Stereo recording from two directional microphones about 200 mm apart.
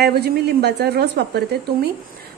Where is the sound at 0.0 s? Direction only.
50° right (ahead or behind).